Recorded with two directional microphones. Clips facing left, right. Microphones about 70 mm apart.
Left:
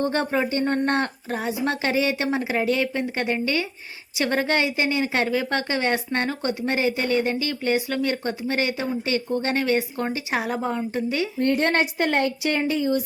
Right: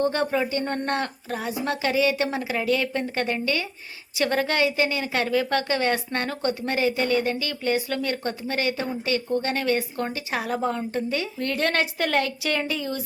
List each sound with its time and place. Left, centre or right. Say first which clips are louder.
0.0 s a woman's voice: even; left